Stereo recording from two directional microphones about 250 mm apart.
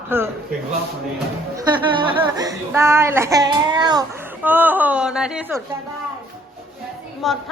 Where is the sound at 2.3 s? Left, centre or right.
Centre.